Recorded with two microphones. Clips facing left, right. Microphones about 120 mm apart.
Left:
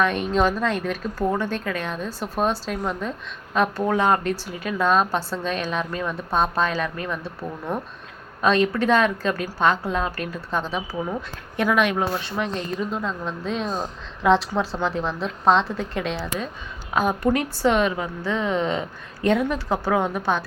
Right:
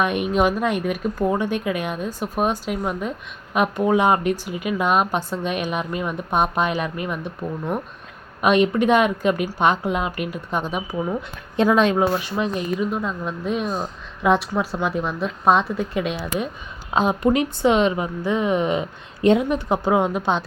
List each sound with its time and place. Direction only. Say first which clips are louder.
0.0 s a woman's voice: right 1 dB; 15° right (ahead or behind)
8.4 s a woman's voice: right 3 dB; 15° right (ahead or behind)
11.5 s speech: right 4 dB; 25° right (ahead or behind)
11.9 s a woman's voice: right 4 dB; 15° right (ahead or behind)
16.9 s a woman's voice: right 2 dB; 20° right (ahead or behind)